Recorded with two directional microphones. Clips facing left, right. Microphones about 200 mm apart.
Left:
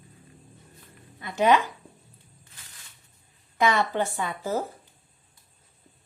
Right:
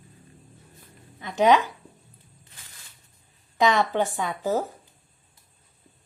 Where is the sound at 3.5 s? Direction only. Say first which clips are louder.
Right 2 dB; 15° right (ahead or behind).